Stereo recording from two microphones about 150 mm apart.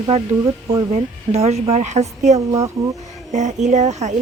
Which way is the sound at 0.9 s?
45° right (ahead or behind).